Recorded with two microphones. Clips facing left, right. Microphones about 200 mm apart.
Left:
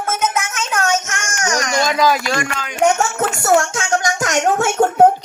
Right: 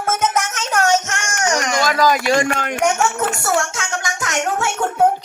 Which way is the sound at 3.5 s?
45° left (ahead or behind).